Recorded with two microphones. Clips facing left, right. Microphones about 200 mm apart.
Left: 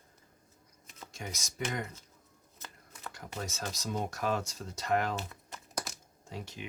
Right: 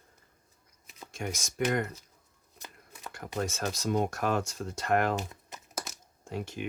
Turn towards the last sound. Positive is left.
turn(degrees=-55)  # may be behind; listen again after turning